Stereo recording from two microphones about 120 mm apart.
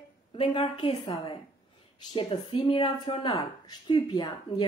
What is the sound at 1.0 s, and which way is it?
A woman's voice, 35° left (ahead or behind).